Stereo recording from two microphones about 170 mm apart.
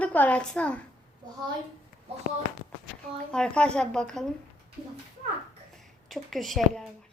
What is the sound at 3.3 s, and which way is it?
Speech, 5° left (ahead or behind).